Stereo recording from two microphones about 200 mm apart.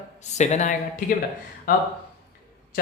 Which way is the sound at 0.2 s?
35° left (ahead or behind).